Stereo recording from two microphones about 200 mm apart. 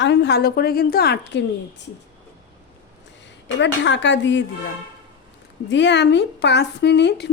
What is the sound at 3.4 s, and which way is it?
A woman's voice, 65° left (ahead or behind).